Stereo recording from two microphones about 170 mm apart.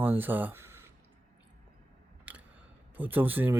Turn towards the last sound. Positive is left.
turn(degrees=-10)  # may be behind; listen again after turning